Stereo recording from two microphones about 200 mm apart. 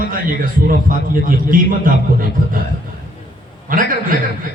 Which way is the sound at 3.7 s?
45° right (ahead or behind).